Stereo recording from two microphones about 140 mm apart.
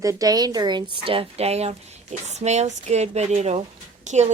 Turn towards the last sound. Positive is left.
turn(degrees=-55)  # may be behind; listen again after turning